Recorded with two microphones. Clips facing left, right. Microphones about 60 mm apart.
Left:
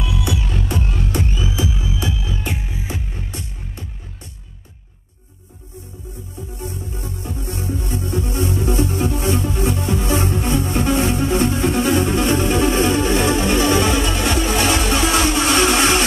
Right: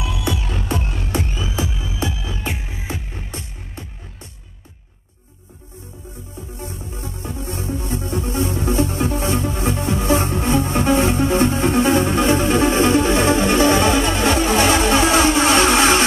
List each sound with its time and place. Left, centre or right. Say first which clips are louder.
0.7 s music: left 1 dB; right
2.4 s music: left 1 dB; right
6.6 s music: left 2 dB; right